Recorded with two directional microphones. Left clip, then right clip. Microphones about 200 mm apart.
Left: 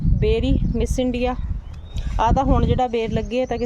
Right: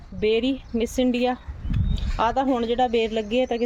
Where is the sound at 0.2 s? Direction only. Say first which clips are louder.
Even; 5° right (ahead or behind).